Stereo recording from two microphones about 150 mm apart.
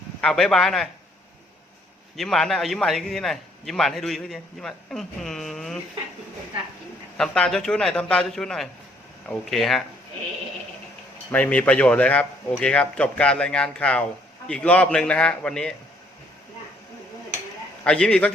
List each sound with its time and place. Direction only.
0.2 s a man's voice: 5° left (ahead or behind)
2.1 s a man's voice: centre (ahead or behind)
7.2 s a man's voice: 5° left (ahead or behind)
11.3 s speech: 10° left (ahead or behind)
17.8 s speech: 5° left (ahead or behind)